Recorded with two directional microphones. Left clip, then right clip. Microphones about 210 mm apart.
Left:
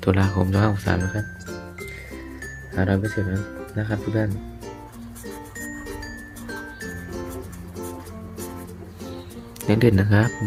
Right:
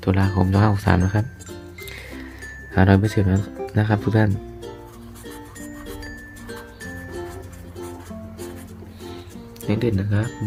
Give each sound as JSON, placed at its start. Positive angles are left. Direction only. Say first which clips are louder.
{"t": 0.0, "sound": "speech", "louder": "even", "side_deg": 0}
{"t": 2.7, "sound": "speech", "louder": "right 5 dB", "side_deg": -30}
{"t": 9.6, "sound": "speech", "louder": "left 4 dB", "side_deg": 15}